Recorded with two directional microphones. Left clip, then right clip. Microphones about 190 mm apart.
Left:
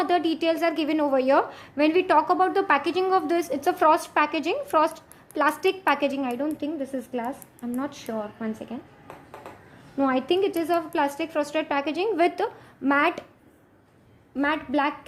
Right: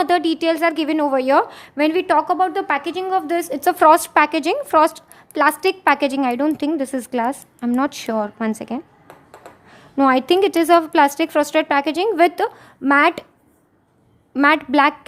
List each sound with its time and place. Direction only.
0.0 s a woman's voice: 25° right (ahead or behind); by 8.8 s 40° right (ahead or behind)
10.0 s a woman's voice: 35° right (ahead or behind)
14.3 s a woman's voice: 40° right (ahead or behind)